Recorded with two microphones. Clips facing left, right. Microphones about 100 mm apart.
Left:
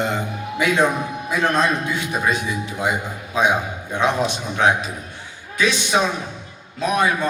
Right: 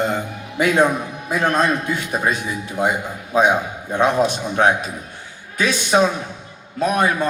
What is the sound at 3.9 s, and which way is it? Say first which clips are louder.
A man's voice: right 3 dB; 45° right (ahead or behind).